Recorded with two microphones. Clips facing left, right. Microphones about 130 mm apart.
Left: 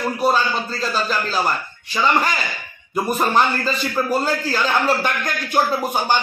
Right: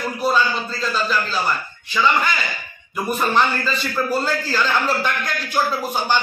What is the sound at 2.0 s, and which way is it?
Speech, 35° left (ahead or behind).